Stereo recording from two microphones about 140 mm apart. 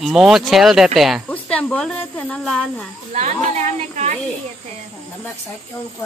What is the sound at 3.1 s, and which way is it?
Speech, 55° right (ahead or behind).